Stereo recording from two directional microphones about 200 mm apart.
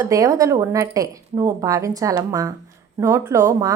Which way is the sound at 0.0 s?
15° right (ahead or behind).